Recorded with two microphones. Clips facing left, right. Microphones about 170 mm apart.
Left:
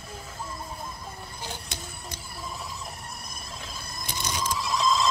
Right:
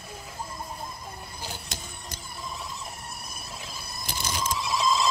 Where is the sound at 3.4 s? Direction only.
5° right (ahead or behind).